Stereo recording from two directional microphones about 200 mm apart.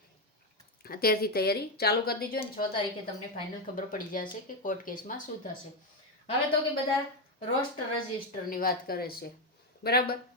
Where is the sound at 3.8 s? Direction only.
45° left (ahead or behind).